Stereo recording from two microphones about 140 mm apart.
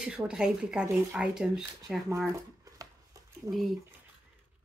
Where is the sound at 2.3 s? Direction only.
25° right (ahead or behind).